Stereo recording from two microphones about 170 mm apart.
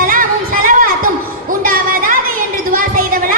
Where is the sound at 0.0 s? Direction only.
55° right (ahead or behind).